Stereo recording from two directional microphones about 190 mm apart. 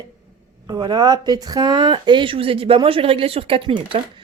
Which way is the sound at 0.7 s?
20° right (ahead or behind).